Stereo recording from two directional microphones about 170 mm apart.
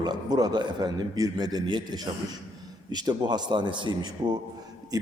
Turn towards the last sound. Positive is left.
turn(degrees=-20)  # may be behind; listen again after turning